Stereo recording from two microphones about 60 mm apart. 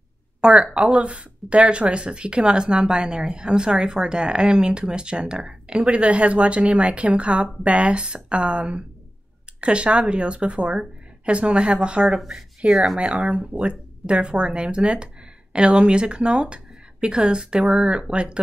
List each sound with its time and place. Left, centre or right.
0.4 s speech: centre
12.2 s speech: centre